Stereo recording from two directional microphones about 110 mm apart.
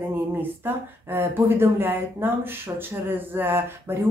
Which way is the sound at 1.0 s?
20° right (ahead or behind).